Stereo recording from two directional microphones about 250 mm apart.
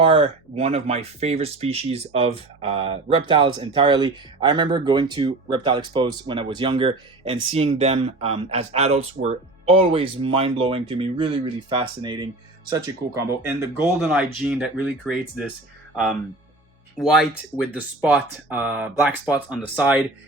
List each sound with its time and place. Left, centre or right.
0.0 s speech: right; by 15.4 s centre
17.0 s speech: centre